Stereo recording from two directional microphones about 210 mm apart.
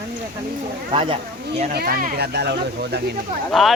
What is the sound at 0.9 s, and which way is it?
Speech, 25° right (ahead or behind).